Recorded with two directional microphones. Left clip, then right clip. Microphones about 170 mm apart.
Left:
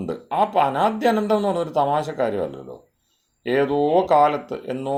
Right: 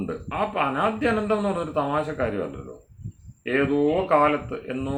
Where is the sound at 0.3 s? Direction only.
55° left (ahead or behind).